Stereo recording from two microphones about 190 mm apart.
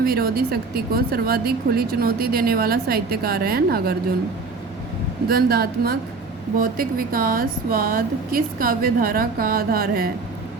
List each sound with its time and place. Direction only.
0.0 s a woman's voice: 50° right (ahead or behind)
5.3 s a woman's voice: 55° right (ahead or behind)